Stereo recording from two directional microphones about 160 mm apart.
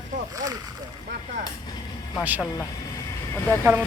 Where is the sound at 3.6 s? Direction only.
10° right (ahead or behind).